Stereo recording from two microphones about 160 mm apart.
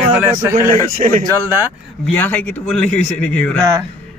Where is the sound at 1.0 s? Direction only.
50° right (ahead or behind).